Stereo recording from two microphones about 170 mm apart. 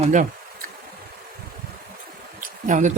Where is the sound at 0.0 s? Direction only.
50° right (ahead or behind).